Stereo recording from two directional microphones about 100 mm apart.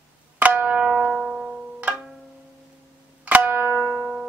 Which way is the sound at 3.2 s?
20° right (ahead or behind).